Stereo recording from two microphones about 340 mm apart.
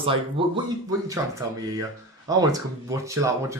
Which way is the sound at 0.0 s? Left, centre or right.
Centre.